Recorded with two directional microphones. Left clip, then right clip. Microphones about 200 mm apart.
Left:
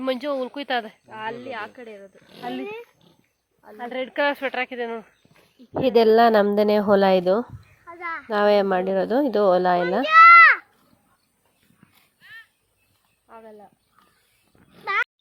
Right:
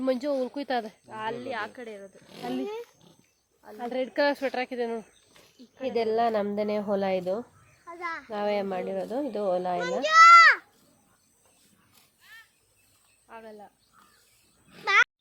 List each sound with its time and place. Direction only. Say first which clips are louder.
0.0 s speech: left 2 dB; centre (ahead or behind)
1.0 s speech: left 2 dB; 15° left (ahead or behind)
3.8 s speech: left 2 dB; 10° right (ahead or behind)
5.8 s a woman's voice: left 10 dB; 30° left (ahead or behind)
7.9 s a child's voice: left 4 dB; 20° left (ahead or behind)
8.3 s a woman's voice: left 11 dB; 30° left (ahead or behind)
10.0 s a sound: left 4 dB; 20° left (ahead or behind)
12.2 s a sound: left 7 dB; 55° right (ahead or behind)
13.2 s a sound: left 1 dB; 35° left (ahead or behind)
14.8 s speech: right 2 dB; 15° left (ahead or behind)